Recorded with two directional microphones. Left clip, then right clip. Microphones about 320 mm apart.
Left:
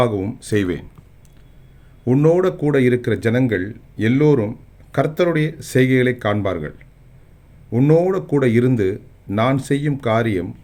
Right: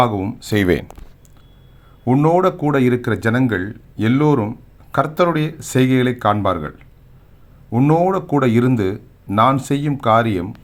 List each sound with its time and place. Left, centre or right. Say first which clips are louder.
0.0 s speech: right 2 dB; centre
2.0 s speech: right 1 dB; centre